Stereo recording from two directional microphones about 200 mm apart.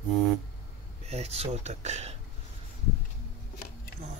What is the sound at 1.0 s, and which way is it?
Speech, 30° right (ahead or behind).